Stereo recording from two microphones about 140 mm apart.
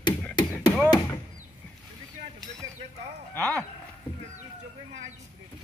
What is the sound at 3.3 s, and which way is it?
Speech, 10° left (ahead or behind).